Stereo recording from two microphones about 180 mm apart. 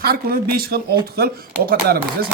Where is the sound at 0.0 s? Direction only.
60° right (ahead or behind).